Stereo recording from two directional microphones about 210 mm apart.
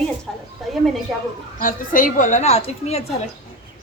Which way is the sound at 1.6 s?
40° left (ahead or behind).